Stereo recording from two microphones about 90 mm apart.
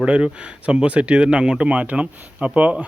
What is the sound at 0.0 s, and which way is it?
A man's voice, 10° right (ahead or behind).